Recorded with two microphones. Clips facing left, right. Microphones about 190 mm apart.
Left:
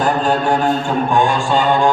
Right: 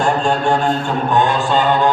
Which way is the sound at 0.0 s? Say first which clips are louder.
Even; 5° left (ahead or behind).